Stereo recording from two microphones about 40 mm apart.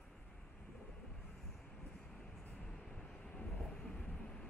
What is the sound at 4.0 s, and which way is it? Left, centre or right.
Vehicle, left.